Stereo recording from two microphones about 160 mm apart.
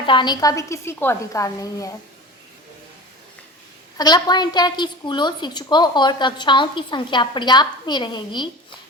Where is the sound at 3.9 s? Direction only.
25° left (ahead or behind).